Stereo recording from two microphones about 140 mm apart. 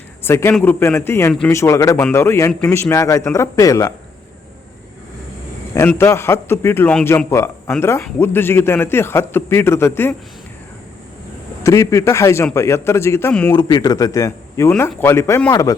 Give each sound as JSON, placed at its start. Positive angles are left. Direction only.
{"t": 0.2, "sound": "a man's voice", "side_deg": 15}
{"t": 6.0, "sound": "a man's voice", "side_deg": 20}
{"t": 11.6, "sound": "a man's voice", "side_deg": 20}
{"t": 13.6, "sound": "a man's voice", "side_deg": 30}
{"t": 15.4, "sound": "speech", "side_deg": 30}